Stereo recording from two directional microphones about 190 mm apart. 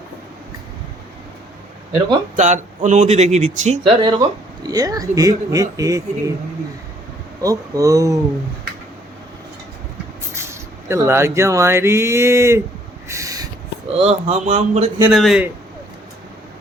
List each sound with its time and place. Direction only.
2.3 s speech: 40° right (ahead or behind)
4.0 s speech: 20° right (ahead or behind)
7.4 s speech: 15° right (ahead or behind)
10.3 s speech: 15° right (ahead or behind)
13.1 s snort: 15° right (ahead or behind)
13.9 s speech: 35° right (ahead or behind)
15.1 s a man's voice: centre (ahead or behind)